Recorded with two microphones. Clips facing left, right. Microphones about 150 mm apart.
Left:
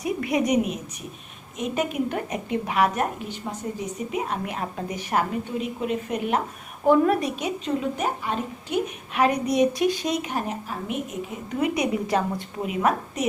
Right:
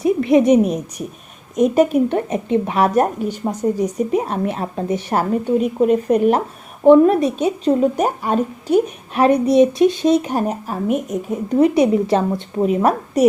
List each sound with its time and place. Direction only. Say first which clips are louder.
0.0 s a woman's voice: right 10 dB; 25° right (ahead or behind)
5.3 s speech: right 11 dB; 45° right (ahead or behind)
6.8 s a woman's voice: right 9 dB; 25° right (ahead or behind)
12.6 s a woman's voice: right 7 dB; 40° right (ahead or behind)